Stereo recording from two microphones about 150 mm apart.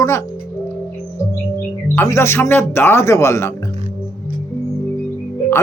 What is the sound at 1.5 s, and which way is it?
Speech, 20° left (ahead or behind).